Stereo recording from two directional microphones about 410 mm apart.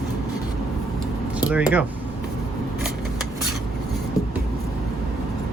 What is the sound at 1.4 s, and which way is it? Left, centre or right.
Speech, centre.